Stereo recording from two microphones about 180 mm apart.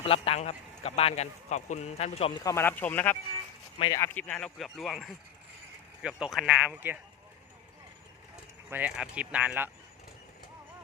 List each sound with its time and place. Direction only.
0.0 s a man's voice: 30° left (ahead or behind)
2.4 s speech: 15° left (ahead or behind)
3.8 s speech: 20° left (ahead or behind); by 7.0 s 10° right (ahead or behind)
8.7 s speech: 5° right (ahead or behind)